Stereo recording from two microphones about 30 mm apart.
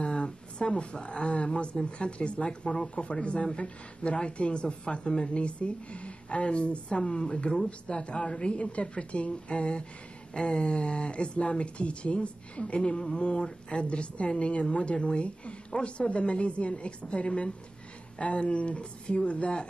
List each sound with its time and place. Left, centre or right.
0.0 s a sound: left
1.9 s speech: left
7.5 s speech: left